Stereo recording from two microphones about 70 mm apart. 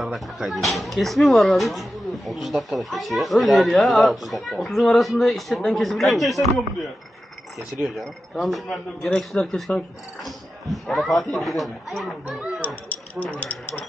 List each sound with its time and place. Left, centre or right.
0.0 s speech: centre
12.6 s speech: left